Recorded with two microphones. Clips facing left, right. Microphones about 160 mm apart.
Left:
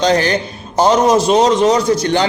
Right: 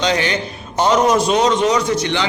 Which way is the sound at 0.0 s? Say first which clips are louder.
Left 5 dB; 40° left (ahead or behind).